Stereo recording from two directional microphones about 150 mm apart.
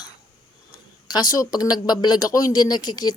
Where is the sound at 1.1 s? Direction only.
25° left (ahead or behind).